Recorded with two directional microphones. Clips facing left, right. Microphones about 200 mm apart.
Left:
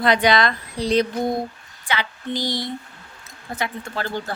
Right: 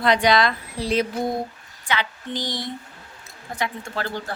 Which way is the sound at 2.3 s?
10° left (ahead or behind).